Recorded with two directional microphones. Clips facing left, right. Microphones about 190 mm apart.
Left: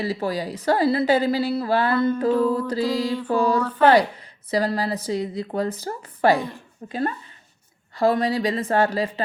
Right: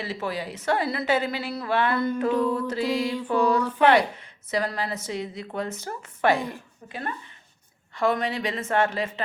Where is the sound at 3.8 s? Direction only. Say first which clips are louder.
Left 4 dB; 35° left (ahead or behind).